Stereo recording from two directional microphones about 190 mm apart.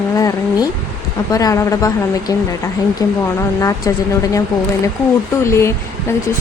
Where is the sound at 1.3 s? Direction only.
20° left (ahead or behind).